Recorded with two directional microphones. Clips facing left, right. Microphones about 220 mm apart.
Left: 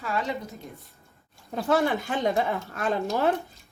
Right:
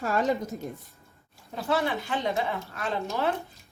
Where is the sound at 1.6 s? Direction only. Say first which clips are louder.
Left 4 dB; 50° left (ahead or behind).